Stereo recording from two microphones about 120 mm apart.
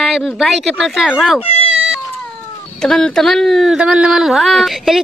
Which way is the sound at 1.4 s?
55° left (ahead or behind).